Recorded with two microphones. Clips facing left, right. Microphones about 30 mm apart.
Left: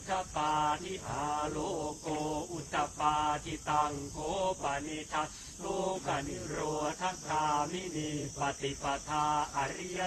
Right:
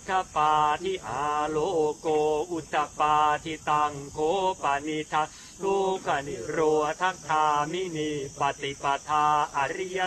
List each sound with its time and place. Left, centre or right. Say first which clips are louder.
0.3 s cricket: right 8 dB; right
1.9 s a sound: right 11 dB; right
2.6 s cricket: right 7 dB; right